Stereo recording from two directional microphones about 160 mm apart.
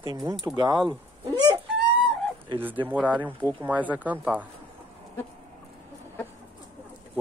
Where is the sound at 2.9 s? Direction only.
10° right (ahead or behind).